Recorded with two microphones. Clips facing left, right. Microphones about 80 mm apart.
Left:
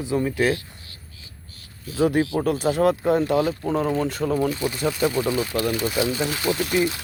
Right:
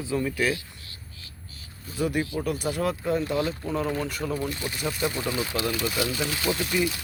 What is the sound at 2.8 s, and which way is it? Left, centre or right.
Speech, left.